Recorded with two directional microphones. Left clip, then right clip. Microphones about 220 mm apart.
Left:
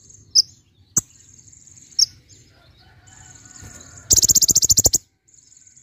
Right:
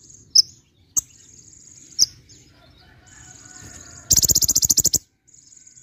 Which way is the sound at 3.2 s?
15° right (ahead or behind).